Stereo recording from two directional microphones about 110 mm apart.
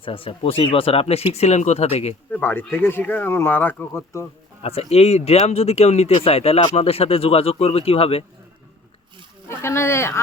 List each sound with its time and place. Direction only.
0.0 s speech: 55° left (ahead or behind); by 2.1 s 75° left (ahead or behind)
2.3 s speech: 20° left (ahead or behind)
4.6 s speech: 65° left (ahead or behind)
9.5 s speech: 25° left (ahead or behind)